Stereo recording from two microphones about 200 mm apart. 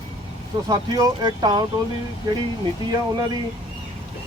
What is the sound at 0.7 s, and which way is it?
Speech, 20° right (ahead or behind).